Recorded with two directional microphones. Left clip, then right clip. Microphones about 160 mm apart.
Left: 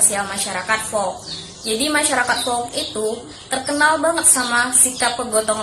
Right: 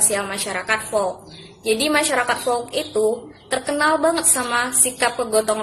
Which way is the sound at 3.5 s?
20° right (ahead or behind).